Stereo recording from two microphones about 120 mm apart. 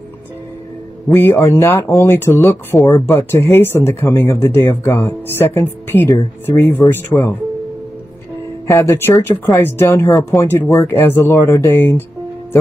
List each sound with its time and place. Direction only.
1.4 s speech: 25° left (ahead or behind)
8.6 s speech: 25° left (ahead or behind)